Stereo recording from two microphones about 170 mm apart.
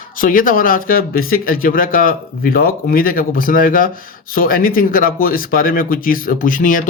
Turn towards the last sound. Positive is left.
turn(degrees=50)  # may be behind; listen again after turning